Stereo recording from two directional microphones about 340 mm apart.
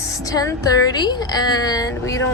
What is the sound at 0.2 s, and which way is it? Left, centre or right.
A woman's voice, centre.